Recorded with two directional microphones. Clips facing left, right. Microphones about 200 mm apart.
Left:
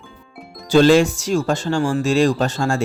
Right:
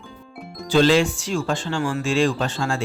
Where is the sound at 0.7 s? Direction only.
45° left (ahead or behind).